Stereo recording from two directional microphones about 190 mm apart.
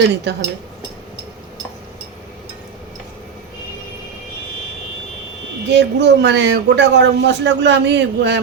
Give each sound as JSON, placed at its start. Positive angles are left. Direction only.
{"t": 0.3, "sound": "speech", "side_deg": -65}
{"t": 5.6, "sound": "speech", "side_deg": -65}